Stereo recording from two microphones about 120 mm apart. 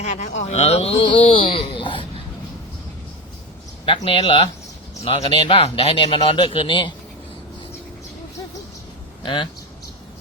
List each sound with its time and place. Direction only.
0.0 s a sound: 70° left (ahead or behind); by 2.0 s 45° left (ahead or behind)
3.9 s speech: 55° left (ahead or behind)
9.2 s speech: 45° left (ahead or behind)